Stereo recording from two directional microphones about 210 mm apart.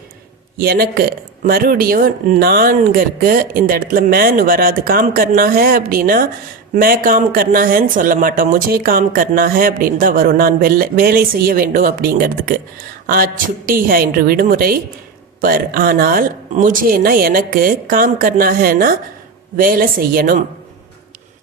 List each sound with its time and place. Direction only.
0.6 s speech: 50° right (ahead or behind)